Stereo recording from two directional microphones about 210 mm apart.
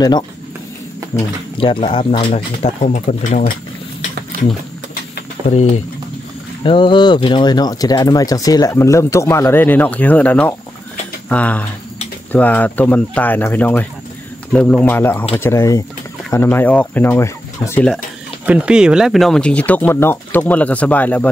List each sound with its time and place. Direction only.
1.1 s speech: 30° left (ahead or behind)
5.4 s speech: 20° right (ahead or behind)
6.6 s speech: 25° left (ahead or behind); by 21.3 s 5° left (ahead or behind)